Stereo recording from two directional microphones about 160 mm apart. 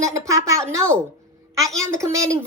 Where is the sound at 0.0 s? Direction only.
20° right (ahead or behind).